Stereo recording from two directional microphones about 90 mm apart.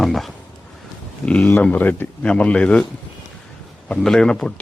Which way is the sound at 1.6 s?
20° left (ahead or behind).